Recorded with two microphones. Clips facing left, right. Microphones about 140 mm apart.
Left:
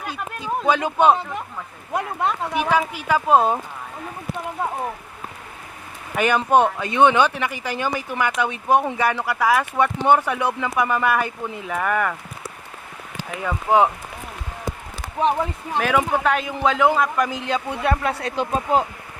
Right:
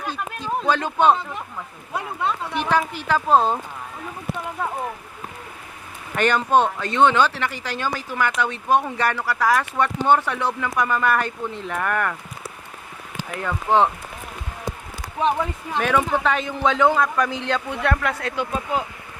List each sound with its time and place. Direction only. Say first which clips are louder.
0.6 s speech: left 2 dB; 10° left (ahead or behind)
1.9 s speech: left 2 dB; 45° left (ahead or behind)
2.6 s speech: left 1 dB; 5° left (ahead or behind)
6.1 s speech: left 1 dB; 10° left (ahead or behind)
13.4 s speech: left 1 dB; 10° left (ahead or behind)
15.8 s a man's voice: left 1 dB; 5° left (ahead or behind)
18.3 s speech: left 4 dB; 40° left (ahead or behind)